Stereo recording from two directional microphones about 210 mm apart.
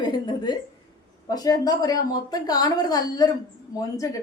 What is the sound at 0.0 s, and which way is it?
A woman's voice, 20° left (ahead or behind).